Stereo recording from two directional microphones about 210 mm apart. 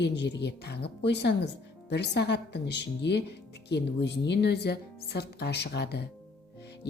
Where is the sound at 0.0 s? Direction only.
55° left (ahead or behind).